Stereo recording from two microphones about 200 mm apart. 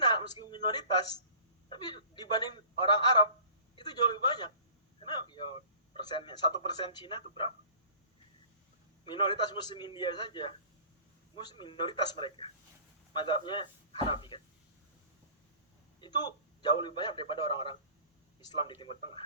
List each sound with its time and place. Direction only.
0.1 s a sound: 20° left (ahead or behind)
1.7 s a man's voice: 20° left (ahead or behind)
9.0 s a man's voice: 25° left (ahead or behind)
16.0 s a man's voice: 20° left (ahead or behind)